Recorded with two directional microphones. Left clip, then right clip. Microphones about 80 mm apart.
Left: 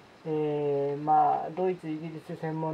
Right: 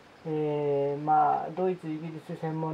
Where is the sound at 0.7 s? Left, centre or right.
Centre.